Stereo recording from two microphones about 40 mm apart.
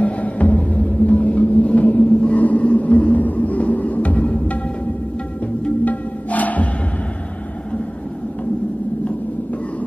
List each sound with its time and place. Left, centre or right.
0.0 s music: left
2.1 s vehicle: left
5.9 s music: left